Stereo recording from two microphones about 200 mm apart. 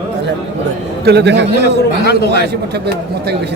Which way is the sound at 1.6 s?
55° left (ahead or behind).